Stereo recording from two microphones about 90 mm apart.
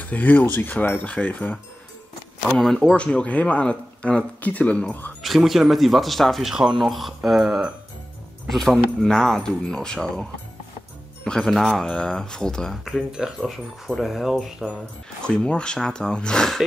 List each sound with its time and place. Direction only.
0.0 s speech: 20° left (ahead or behind)
2.4 s speech: 5° left (ahead or behind)
5.2 s speech: centre (ahead or behind)
11.2 s speech: 10° left (ahead or behind)
15.2 s speech: 10° left (ahead or behind)